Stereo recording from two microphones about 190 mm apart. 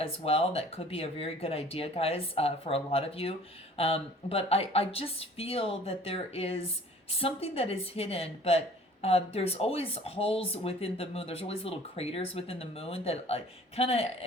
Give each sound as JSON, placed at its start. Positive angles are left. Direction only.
{"t": 0.0, "sound": "a woman's voice", "side_deg": 30}